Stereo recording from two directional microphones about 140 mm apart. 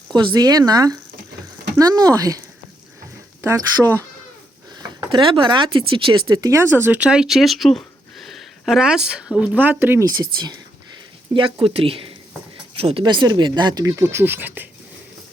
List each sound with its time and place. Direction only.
0.1 s speech: 35° right (ahead or behind)
3.4 s speech: 25° right (ahead or behind)
10.1 s speech: 30° right (ahead or behind); by 14.7 s 15° right (ahead or behind)